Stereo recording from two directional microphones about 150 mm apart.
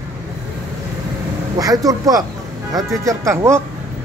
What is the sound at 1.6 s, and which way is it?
Speech, 25° right (ahead or behind).